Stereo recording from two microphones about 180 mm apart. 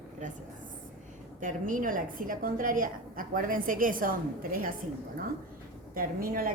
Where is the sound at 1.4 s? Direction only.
45° right (ahead or behind).